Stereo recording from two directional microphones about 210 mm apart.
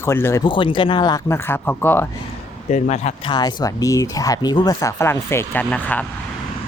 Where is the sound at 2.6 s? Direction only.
35° left (ahead or behind).